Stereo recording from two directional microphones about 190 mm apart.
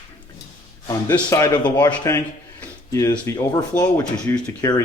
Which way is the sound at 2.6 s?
15° left (ahead or behind).